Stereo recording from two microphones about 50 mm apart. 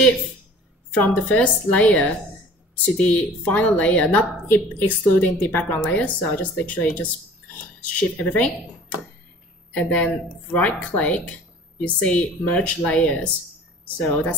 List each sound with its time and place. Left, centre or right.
0.9 s a woman's voice: left
4.5 s a woman's voice: left